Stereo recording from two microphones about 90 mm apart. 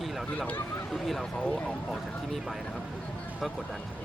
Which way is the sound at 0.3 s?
15° left (ahead or behind).